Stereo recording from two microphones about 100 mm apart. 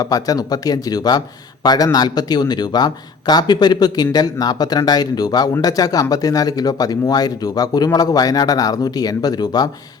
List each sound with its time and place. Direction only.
0.0 s speech: 40° left (ahead or behind)